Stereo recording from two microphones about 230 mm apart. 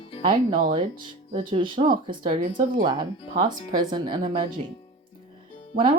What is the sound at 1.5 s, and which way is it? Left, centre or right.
Speech, right.